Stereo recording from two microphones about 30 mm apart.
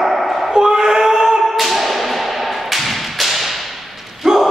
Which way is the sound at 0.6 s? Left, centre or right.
Right.